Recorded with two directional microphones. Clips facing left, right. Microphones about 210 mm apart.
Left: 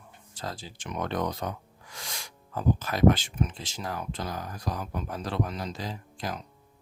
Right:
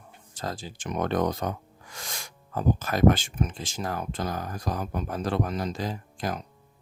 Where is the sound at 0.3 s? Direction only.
45° right (ahead or behind).